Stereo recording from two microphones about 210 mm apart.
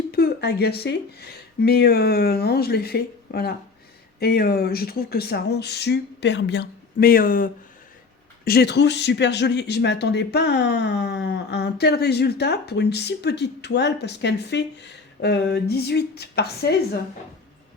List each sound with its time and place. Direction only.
0.1 s speech: 50° left (ahead or behind)